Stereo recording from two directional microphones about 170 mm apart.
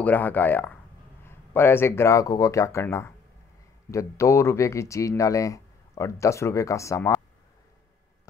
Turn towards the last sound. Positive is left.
turn(degrees=15)  # may be behind; listen again after turning